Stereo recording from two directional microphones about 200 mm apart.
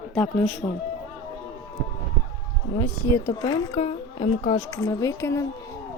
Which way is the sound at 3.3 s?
20° left (ahead or behind).